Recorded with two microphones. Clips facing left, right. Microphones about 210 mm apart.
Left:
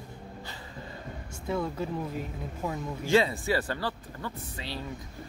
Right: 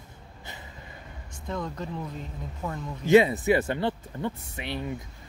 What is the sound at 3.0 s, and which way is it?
Speech, 20° right (ahead or behind).